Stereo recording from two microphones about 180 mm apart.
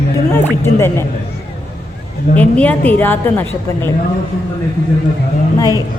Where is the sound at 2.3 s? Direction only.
10° left (ahead or behind).